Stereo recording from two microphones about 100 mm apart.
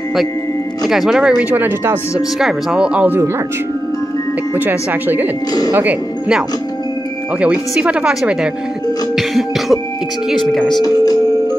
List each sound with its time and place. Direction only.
0.8 s speech: 5° right (ahead or behind)
2.3 s speech: 5° right (ahead or behind)
4.6 s speech: 20° right (ahead or behind)
7.3 s speech: 10° right (ahead or behind)
9.1 s music: centre (ahead or behind)